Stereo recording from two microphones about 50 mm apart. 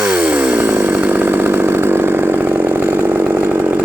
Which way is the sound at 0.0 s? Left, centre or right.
Centre.